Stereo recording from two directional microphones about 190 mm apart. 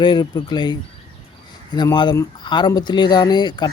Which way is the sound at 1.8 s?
25° left (ahead or behind).